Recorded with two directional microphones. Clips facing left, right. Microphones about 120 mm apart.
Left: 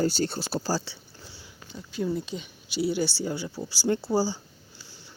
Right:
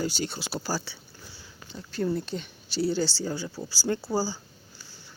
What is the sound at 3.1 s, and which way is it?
Speech, 20° left (ahead or behind).